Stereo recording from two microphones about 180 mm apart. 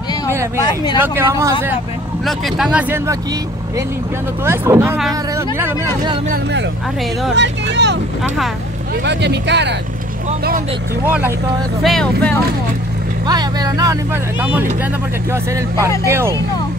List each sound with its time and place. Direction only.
0.6 s speech: 25° left (ahead or behind)
0.9 s speech: 10° right (ahead or behind)
2.2 s speech: centre (ahead or behind)
4.5 s speech: 15° right (ahead or behind)
7.3 s speech: 75° right (ahead or behind)
9.0 s speech: 70° right (ahead or behind)
11.1 s speech: 10° right (ahead or behind)
11.8 s speech: 5° left (ahead or behind)
13.3 s speech: 20° right (ahead or behind)
15.3 s speech: 15° right (ahead or behind)